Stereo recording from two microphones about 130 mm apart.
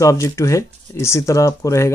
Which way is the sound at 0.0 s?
25° left (ahead or behind).